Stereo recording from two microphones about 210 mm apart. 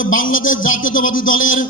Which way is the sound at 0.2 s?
40° left (ahead or behind).